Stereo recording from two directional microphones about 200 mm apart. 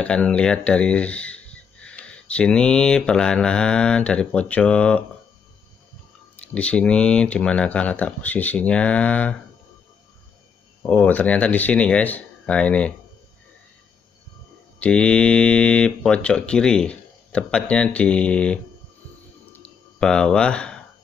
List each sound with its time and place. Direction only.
0.0 s speech: 5° left (ahead or behind)
6.3 s speech: 5° left (ahead or behind)
10.8 s speech: 10° left (ahead or behind)
14.8 s speech: 5° left (ahead or behind)
19.5 s a sound: 5° left (ahead or behind)